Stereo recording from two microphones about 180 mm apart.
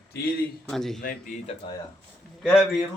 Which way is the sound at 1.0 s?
55° left (ahead or behind).